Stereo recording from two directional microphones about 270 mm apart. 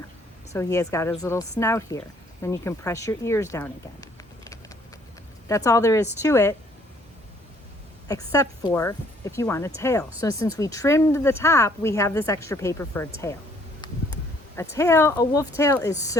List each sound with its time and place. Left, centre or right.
0.5 s speech: centre
8.0 s speech: centre
13.8 s a sound: centre
14.5 s speech: centre